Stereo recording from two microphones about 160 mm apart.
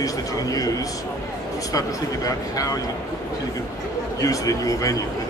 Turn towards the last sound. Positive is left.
turn(degrees=20)  # may be behind; listen again after turning